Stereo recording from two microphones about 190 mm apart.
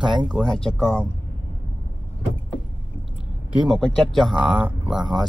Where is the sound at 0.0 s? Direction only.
25° right (ahead or behind).